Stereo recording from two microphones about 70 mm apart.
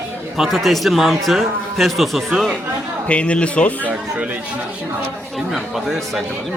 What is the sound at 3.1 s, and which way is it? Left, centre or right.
Speech, centre.